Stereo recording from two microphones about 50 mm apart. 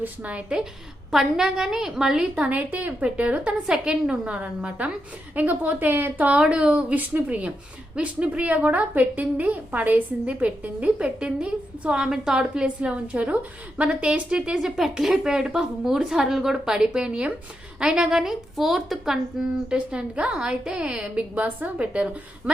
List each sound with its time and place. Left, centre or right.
0.0 s a woman's voice: right
1.1 s a woman's voice: centre
2.6 s a woman's voice: right
3.7 s a woman's voice: centre
4.4 s a woman's voice: right
6.3 s a woman's voice: right; by 19.5 s centre
19.7 s a woman's voice: right
21.3 s a woman's voice: right